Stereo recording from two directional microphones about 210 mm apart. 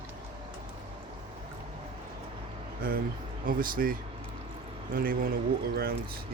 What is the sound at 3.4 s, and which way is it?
Speech, 45° right (ahead or behind).